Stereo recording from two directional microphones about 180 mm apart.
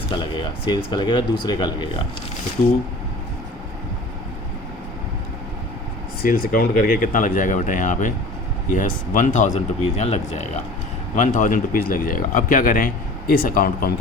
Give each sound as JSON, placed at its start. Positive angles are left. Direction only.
{"t": 0.1, "sound": "speech", "side_deg": 25}
{"t": 6.2, "sound": "speech", "side_deg": 50}